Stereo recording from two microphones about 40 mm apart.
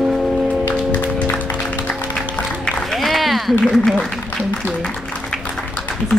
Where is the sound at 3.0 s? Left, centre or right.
Centre.